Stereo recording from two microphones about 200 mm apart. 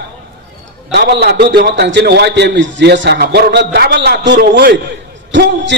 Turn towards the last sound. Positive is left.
turn(degrees=-60)  # may be behind; listen again after turning